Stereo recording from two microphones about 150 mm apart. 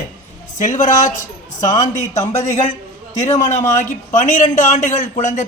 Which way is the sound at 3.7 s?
55° left (ahead or behind).